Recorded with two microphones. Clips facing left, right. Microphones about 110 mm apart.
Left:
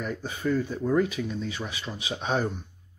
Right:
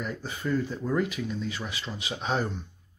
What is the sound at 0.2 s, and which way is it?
Speech, 15° left (ahead or behind).